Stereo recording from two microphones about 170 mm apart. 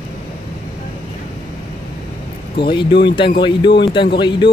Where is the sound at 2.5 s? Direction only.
30° left (ahead or behind).